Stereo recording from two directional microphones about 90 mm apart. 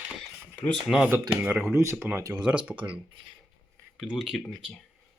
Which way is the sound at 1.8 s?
30° right (ahead or behind).